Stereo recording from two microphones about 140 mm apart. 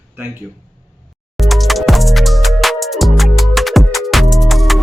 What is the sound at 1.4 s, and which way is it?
Music, centre (ahead or behind).